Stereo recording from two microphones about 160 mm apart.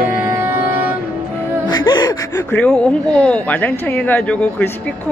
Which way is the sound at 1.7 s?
25° left (ahead or behind).